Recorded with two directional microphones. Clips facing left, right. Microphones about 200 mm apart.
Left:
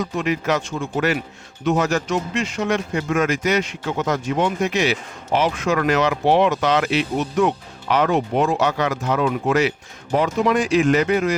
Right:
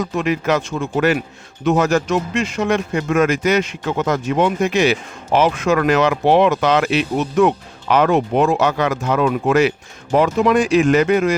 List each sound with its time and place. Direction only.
0.3 s a man's voice: 55° right (ahead or behind)